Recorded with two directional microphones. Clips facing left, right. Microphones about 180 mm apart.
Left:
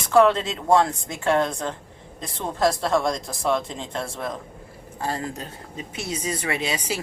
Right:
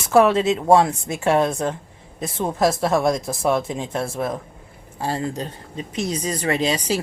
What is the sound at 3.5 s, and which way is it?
Speech, 10° right (ahead or behind).